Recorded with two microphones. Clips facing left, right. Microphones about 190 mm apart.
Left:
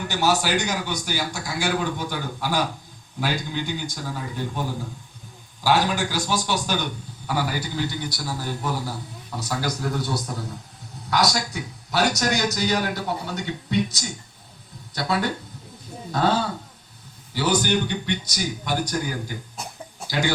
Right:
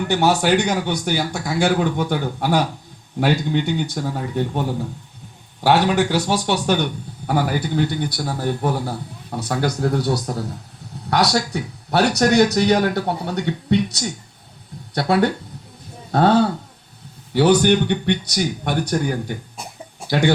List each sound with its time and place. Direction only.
0.1 s a man's voice: 60° right (ahead or behind)
5.6 s a man's voice: 65° right (ahead or behind)